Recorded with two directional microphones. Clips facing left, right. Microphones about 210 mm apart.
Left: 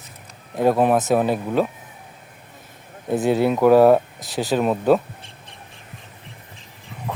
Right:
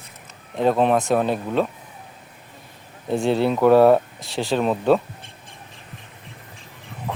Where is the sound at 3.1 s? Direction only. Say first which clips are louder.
Left 1 dB; 10° left (ahead or behind).